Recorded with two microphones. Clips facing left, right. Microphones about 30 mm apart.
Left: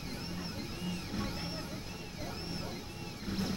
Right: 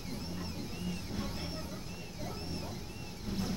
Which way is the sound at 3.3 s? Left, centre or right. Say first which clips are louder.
Left 1 dB; left.